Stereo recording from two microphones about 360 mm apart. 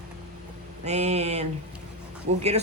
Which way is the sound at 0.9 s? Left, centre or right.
Centre.